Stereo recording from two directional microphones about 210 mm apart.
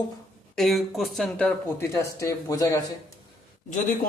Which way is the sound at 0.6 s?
Centre (ahead or behind).